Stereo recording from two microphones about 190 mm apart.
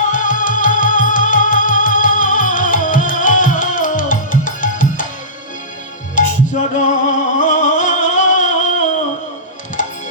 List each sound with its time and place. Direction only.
0.1 s music: 45° left (ahead or behind)
6.1 s music: 40° left (ahead or behind)